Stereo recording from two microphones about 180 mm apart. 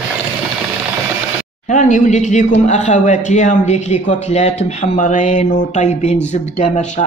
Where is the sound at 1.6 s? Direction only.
45° left (ahead or behind).